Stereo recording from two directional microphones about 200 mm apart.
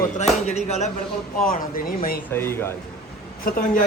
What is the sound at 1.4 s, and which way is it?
Speech, 45° left (ahead or behind).